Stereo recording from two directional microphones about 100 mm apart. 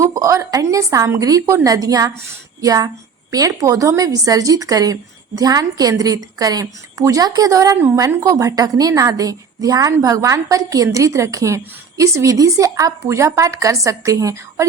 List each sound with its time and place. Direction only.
0.0 s a woman's voice: 30° right (ahead or behind)